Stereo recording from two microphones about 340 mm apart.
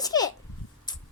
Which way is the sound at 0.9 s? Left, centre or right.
Centre.